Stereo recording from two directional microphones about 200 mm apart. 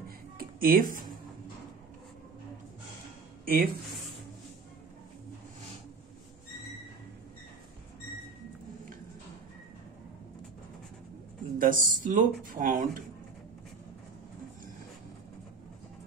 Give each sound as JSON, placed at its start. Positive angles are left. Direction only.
{"t": 0.4, "sound": "speech", "side_deg": -50}
{"t": 3.4, "sound": "speech", "side_deg": -45}
{"t": 11.5, "sound": "speech", "side_deg": -45}